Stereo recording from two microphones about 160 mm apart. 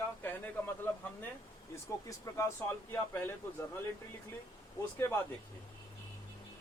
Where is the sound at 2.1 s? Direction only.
15° left (ahead or behind).